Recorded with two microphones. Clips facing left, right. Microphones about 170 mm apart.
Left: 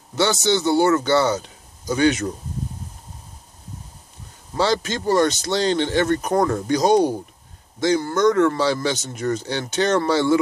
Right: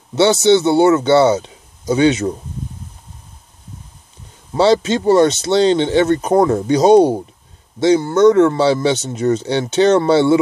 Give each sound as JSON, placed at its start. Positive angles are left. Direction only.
{"t": 0.1, "sound": "speech", "side_deg": -25}
{"t": 4.6, "sound": "speech", "side_deg": -25}